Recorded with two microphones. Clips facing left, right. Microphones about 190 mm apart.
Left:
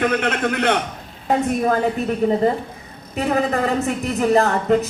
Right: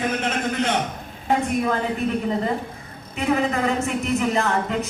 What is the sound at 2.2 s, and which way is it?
A woman's voice, 45° left (ahead or behind).